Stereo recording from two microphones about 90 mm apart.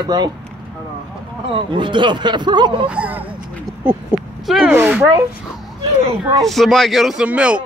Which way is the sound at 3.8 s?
20° right (ahead or behind).